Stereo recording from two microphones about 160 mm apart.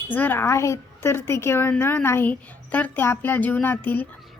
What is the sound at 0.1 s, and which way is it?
A woman's voice, 10° left (ahead or behind).